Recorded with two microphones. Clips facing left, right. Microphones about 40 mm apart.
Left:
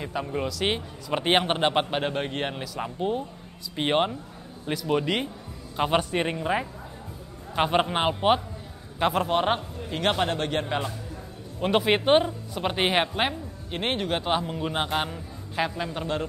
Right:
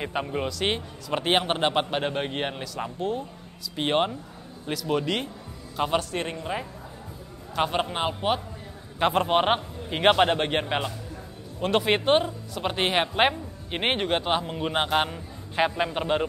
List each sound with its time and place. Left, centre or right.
0.0 s a man's voice: right
0.5 s a man's voice: centre
9.0 s a man's voice: centre
9.3 s a man's voice: right
11.6 s a man's voice: centre
13.1 s a man's voice: centre
14.1 s a man's voice: centre; by 16.3 s right